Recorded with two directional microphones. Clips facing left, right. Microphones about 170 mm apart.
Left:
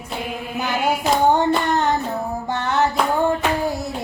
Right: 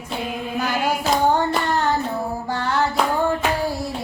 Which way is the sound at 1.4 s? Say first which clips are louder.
Left 2 dB; 20° left (ahead or behind).